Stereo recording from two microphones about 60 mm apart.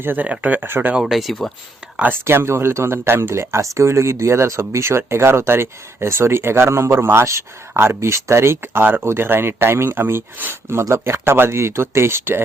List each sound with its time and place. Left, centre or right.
0.0 s speech: right
1.0 s speech: centre
2.2 s speech: right
10.7 s speech: right